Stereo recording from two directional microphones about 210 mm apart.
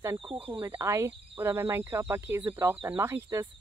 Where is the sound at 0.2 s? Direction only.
25° right (ahead or behind).